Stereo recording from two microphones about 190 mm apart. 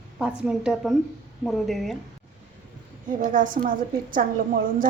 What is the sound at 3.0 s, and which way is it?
A woman's voice, 45° right (ahead or behind).